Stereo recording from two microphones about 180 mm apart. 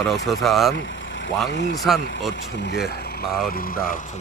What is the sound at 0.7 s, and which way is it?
Vehicle, 90° left.